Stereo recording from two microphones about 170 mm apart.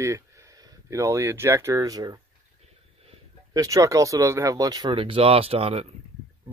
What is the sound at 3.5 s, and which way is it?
Speech, 20° right (ahead or behind).